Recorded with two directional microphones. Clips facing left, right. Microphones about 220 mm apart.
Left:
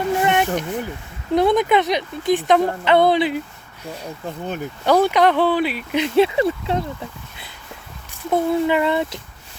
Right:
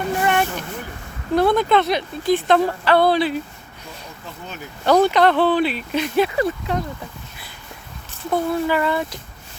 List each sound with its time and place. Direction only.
0.2 s a sound: 20° left (ahead or behind)
1.4 s speech: 20° left (ahead or behind)
4.9 s speech: 10° left (ahead or behind)
6.1 s speech: 25° left (ahead or behind)
8.2 s speech: 20° left (ahead or behind)